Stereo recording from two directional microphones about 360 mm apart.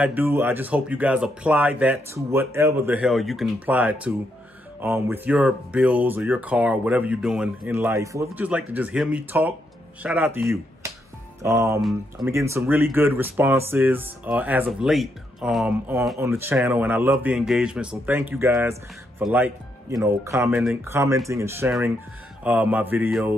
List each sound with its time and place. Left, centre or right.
0.0 s speech: centre